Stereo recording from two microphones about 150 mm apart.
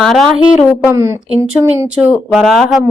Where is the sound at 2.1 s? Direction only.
5° right (ahead or behind).